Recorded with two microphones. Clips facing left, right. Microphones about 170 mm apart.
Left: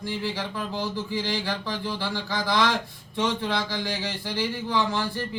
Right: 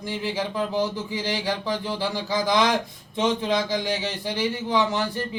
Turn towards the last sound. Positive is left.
turn(degrees=-20)  # may be behind; listen again after turning